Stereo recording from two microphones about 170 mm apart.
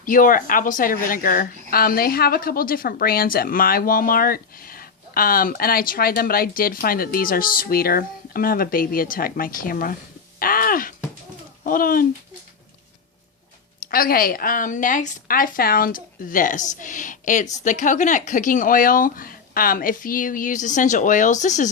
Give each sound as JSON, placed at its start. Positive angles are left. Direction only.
{"t": 0.0, "sound": "speech", "side_deg": 55}
{"t": 10.4, "sound": "a sound", "side_deg": 55}
{"t": 11.6, "sound": "speech", "side_deg": 55}
{"t": 13.8, "sound": "a woman's voice", "side_deg": 60}